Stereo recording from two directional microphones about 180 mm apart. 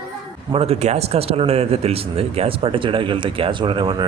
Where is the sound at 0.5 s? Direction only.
35° right (ahead or behind).